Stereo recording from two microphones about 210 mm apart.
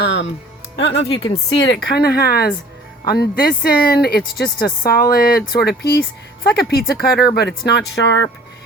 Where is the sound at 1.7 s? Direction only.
50° left (ahead or behind).